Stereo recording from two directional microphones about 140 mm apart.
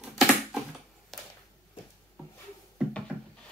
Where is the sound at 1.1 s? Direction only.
Centre (ahead or behind).